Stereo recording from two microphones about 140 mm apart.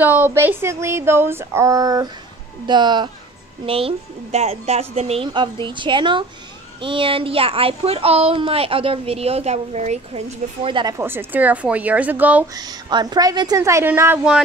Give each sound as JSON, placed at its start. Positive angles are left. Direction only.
{"t": 0.0, "sound": "female singing", "side_deg": -15}
{"t": 2.6, "sound": "a woman's voice", "side_deg": -30}
{"t": 3.6, "sound": "a woman's voice", "side_deg": -40}
{"t": 11.0, "sound": "female singing", "side_deg": -15}
{"t": 12.5, "sound": "a woman's voice", "side_deg": -30}